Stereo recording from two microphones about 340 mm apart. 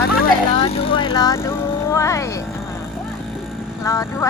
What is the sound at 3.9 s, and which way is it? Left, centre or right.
Vehicle, centre.